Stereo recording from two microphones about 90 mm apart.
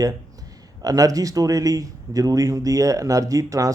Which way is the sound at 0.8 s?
40° right (ahead or behind).